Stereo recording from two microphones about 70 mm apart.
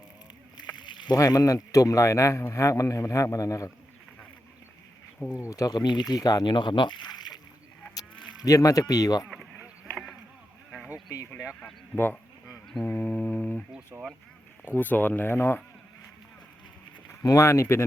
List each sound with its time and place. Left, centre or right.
0.8 s rowboat: left
1.2 s speech: left
5.3 s speech: left
5.7 s speech: left
8.4 s speech: left
12.8 s a sound: left
13.9 s speech: centre
14.6 s speech: left
17.2 s speech: left